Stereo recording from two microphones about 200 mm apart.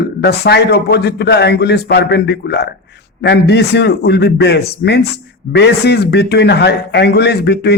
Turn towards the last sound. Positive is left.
turn(degrees=55)  # may be behind; listen again after turning